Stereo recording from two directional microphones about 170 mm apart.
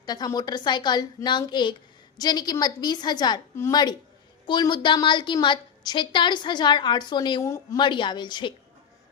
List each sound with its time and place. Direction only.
0.0 s a woman's voice: 25° left (ahead or behind)